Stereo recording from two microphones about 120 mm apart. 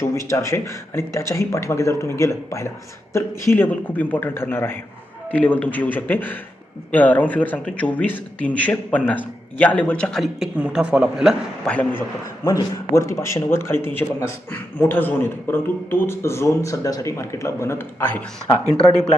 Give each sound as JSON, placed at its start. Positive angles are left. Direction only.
{"t": 0.1, "sound": "speech", "side_deg": 25}
{"t": 10.6, "sound": "a man's voice", "side_deg": -10}
{"t": 11.6, "sound": "speech", "side_deg": 10}
{"t": 12.5, "sound": "speech", "side_deg": 30}
{"t": 18.6, "sound": "speech", "side_deg": -30}